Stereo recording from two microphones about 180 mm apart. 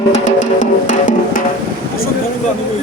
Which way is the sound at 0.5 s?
45° left (ahead or behind).